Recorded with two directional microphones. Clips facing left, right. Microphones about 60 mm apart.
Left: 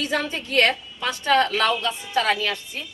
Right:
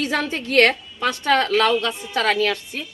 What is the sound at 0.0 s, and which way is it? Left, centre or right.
A woman's voice, right.